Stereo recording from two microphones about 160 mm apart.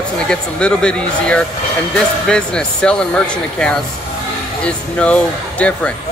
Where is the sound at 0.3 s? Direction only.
5° left (ahead or behind).